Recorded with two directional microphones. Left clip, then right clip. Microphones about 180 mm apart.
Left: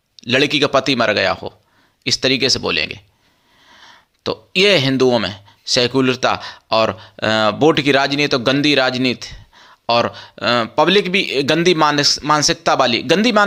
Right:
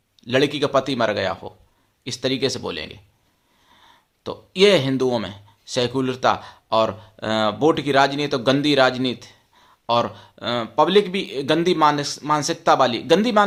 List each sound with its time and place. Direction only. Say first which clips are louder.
0.2 s speech: left 5 dB; 20° left (ahead or behind)